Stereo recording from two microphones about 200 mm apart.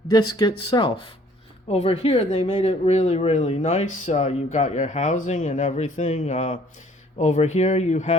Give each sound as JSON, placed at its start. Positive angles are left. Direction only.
{"t": 0.1, "sound": "speech", "side_deg": 20}